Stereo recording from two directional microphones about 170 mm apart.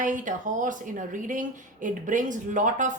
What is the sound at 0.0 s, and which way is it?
A woman's voice, 50° right (ahead or behind).